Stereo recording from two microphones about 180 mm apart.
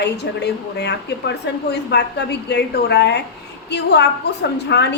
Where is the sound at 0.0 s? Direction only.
70° left (ahead or behind).